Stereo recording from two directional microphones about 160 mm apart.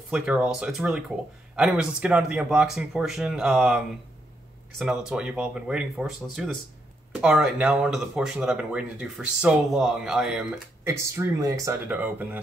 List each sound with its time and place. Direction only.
0.1 s speech: 5° right (ahead or behind)
10.8 s speech: 15° right (ahead or behind)